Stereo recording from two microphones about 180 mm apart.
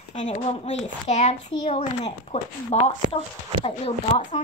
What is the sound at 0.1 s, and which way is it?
A child's voice, 40° left (ahead or behind).